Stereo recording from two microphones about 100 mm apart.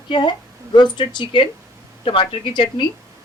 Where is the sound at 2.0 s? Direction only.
65° left (ahead or behind).